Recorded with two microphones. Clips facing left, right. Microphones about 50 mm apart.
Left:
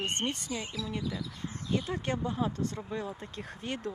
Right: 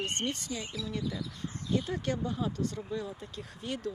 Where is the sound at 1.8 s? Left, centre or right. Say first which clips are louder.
Even; left.